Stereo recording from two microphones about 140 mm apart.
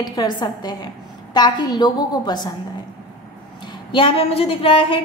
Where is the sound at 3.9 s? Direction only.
40° left (ahead or behind).